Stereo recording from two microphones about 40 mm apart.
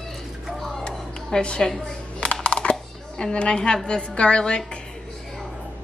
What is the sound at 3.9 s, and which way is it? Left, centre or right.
Speech, left.